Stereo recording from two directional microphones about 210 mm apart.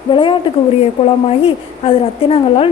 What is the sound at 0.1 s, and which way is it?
A woman's voice, 25° left (ahead or behind).